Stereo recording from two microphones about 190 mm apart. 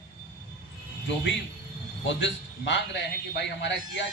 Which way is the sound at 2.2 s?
70° left (ahead or behind).